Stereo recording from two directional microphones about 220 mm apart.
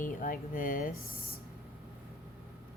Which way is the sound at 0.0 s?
40° left (ahead or behind).